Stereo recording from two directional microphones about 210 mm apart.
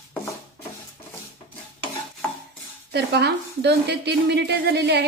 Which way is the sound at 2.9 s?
55° right (ahead or behind).